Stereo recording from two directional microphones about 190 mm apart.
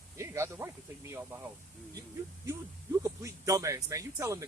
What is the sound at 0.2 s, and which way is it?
Speech, 15° right (ahead or behind).